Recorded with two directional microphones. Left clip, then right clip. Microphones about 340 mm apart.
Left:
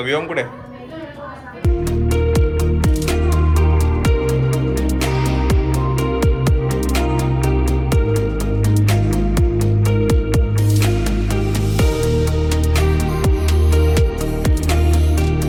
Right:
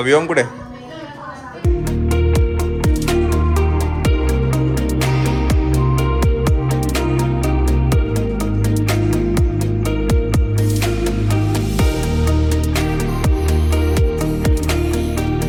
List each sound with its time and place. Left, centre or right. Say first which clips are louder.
0.1 s speech: right 9 dB; centre
9.0 s music: right 3 dB; centre